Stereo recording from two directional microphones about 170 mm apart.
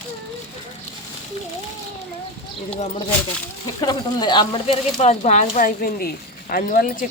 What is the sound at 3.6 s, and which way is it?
Speech, 25° left (ahead or behind).